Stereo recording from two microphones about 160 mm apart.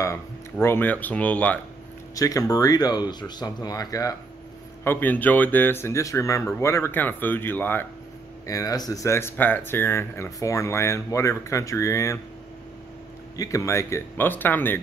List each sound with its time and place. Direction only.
0.0 s speech: 15° left (ahead or behind)
2.1 s speech: 20° left (ahead or behind)
4.8 s speech: 10° left (ahead or behind)
13.4 s speech: 20° left (ahead or behind)